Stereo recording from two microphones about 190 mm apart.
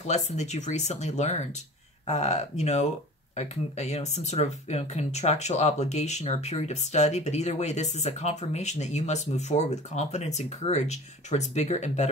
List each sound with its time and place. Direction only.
0.0 s speech: 35° left (ahead or behind)